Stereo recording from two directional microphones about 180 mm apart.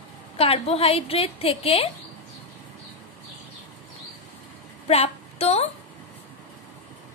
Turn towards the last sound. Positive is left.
turn(degrees=35)  # may be behind; listen again after turning